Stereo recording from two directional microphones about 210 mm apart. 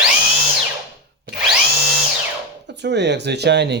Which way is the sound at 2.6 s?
55° right (ahead or behind).